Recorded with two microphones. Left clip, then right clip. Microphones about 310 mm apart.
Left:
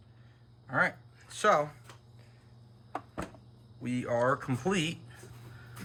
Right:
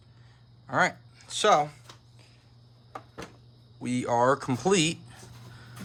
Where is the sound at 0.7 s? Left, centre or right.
Centre.